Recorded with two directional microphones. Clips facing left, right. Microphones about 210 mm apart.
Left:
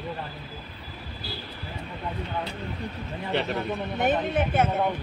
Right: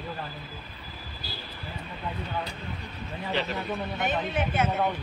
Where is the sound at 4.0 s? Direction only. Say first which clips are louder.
Left 6 dB; 55° left (ahead or behind).